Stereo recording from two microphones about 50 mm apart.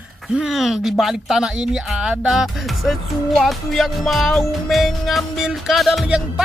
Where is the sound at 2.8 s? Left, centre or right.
Centre.